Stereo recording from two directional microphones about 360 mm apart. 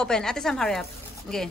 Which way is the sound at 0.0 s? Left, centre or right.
Centre.